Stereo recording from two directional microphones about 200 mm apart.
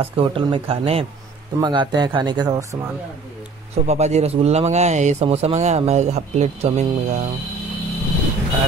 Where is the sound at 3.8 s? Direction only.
35° right (ahead or behind).